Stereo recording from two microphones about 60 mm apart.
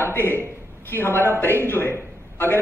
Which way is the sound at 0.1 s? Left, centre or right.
Left.